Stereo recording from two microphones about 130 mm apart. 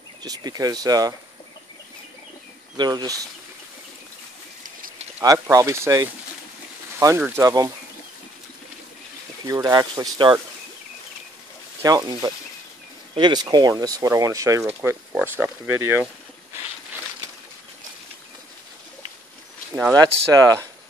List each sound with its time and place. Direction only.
0.2 s speech: 30° right (ahead or behind)
2.8 s speech: 30° right (ahead or behind)
5.2 s speech: 25° right (ahead or behind)
9.5 s speech: 30° right (ahead or behind)
11.8 s speech: 30° right (ahead or behind)
15.2 s speech: 15° right (ahead or behind)
19.9 s speech: 30° right (ahead or behind)